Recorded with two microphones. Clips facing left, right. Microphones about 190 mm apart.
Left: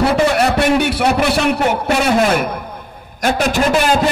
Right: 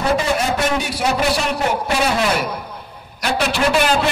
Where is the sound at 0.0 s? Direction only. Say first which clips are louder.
Left 5 dB; 70° left (ahead or behind); by 3.4 s 45° left (ahead or behind).